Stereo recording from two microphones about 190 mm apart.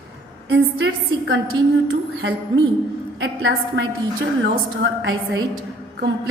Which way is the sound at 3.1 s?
70° right (ahead or behind).